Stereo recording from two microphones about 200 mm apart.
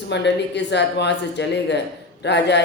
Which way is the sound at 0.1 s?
60° left (ahead or behind).